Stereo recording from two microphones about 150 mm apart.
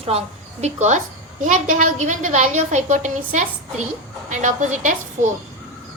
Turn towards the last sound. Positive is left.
turn(degrees=-55)  # may be behind; listen again after turning